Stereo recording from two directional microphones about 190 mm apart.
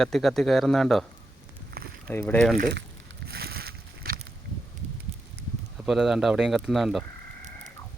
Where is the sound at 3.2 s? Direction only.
55° right (ahead or behind).